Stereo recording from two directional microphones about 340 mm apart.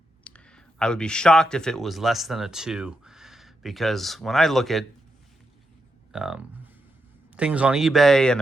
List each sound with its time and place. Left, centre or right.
0.3 s speech: centre
6.1 s speech: centre